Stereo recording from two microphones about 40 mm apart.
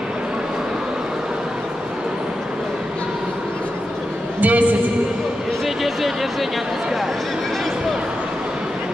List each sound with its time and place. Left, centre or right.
4.4 s a woman's voice: right